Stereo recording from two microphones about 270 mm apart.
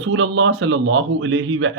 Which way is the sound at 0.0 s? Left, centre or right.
Right.